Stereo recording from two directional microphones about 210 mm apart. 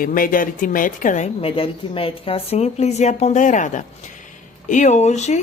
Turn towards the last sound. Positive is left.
turn(degrees=35)  # may be behind; listen again after turning